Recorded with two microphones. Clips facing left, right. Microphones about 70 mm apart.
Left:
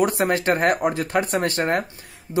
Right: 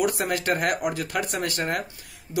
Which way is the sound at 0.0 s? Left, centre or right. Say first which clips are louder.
Left 5 dB; left.